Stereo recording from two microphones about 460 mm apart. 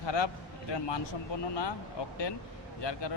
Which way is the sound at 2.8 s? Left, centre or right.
Left.